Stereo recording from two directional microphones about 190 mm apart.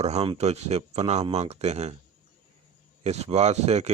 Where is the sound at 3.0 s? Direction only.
35° right (ahead or behind).